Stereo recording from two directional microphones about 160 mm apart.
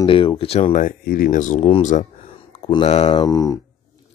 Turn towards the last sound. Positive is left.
turn(degrees=20)  # may be behind; listen again after turning